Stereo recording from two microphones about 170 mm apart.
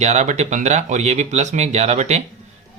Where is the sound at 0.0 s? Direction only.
40° right (ahead or behind).